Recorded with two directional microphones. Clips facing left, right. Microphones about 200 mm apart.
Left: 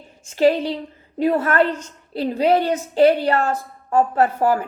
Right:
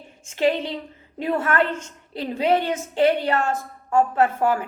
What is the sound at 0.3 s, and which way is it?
A woman's voice, 35° left (ahead or behind).